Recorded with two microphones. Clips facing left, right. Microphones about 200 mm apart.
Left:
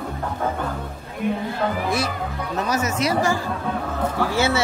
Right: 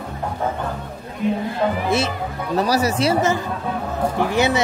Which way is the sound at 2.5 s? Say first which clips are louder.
Right 5 dB; 35° right (ahead or behind).